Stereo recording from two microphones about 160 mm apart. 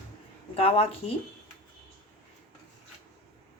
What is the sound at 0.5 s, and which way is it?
Speech, 35° left (ahead or behind).